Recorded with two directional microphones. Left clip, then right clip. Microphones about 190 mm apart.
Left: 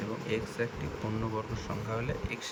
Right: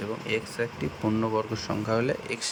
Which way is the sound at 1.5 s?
30° right (ahead or behind).